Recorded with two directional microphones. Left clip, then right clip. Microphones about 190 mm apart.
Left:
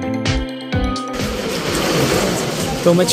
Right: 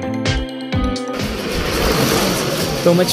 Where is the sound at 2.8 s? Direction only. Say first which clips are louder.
Even; 5° left (ahead or behind).